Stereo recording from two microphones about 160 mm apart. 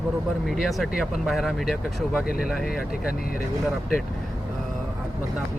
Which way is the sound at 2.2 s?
65° left (ahead or behind).